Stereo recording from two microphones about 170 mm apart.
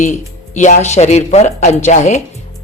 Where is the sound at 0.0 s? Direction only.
45° left (ahead or behind).